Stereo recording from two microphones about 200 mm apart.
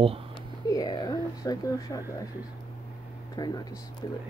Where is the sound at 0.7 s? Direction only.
20° left (ahead or behind).